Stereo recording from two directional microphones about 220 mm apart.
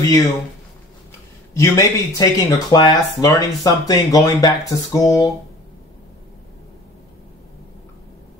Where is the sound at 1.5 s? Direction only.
15° left (ahead or behind).